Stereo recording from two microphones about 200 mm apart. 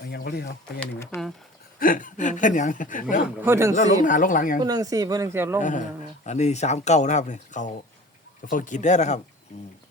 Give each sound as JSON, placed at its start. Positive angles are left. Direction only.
{"t": 0.1, "sound": "a sound", "side_deg": 55}
{"t": 0.8, "sound": "speech", "side_deg": 15}
{"t": 1.8, "sound": "speech", "side_deg": 45}
{"t": 3.2, "sound": "speech", "side_deg": -5}
{"t": 3.8, "sound": "speech", "side_deg": 40}
{"t": 4.6, "sound": "speech", "side_deg": -20}
{"t": 5.6, "sound": "speech", "side_deg": 35}